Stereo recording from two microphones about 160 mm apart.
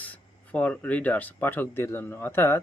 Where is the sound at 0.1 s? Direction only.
10° left (ahead or behind).